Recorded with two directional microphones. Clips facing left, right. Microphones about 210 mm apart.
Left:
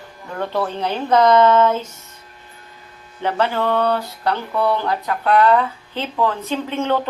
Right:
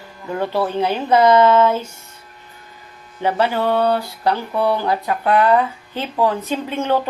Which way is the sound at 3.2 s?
10° right (ahead or behind).